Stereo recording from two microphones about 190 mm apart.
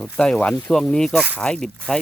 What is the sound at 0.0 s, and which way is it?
Speech, 5° left (ahead or behind).